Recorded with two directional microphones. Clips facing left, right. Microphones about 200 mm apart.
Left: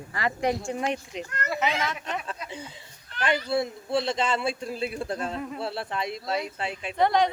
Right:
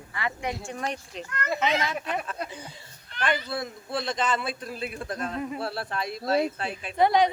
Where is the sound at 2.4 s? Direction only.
25° left (ahead or behind).